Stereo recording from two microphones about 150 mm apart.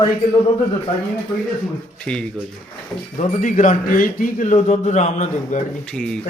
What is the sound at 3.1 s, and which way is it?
A man's voice, 55° left (ahead or behind).